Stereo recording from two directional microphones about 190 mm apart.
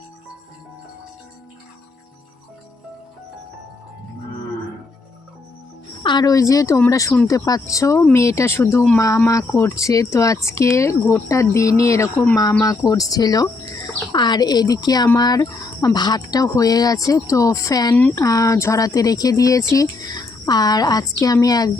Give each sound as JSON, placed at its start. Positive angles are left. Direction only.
{"t": 6.0, "sound": "speech", "side_deg": 20}